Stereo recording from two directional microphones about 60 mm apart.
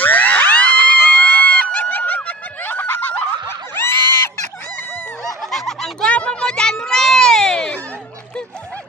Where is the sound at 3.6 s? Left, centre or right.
Left.